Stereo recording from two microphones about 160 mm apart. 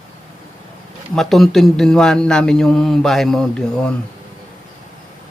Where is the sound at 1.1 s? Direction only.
Centre (ahead or behind).